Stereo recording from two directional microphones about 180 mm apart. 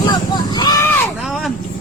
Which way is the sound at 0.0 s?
20° left (ahead or behind).